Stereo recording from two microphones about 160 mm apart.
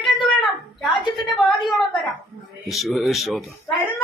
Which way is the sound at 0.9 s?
30° left (ahead or behind).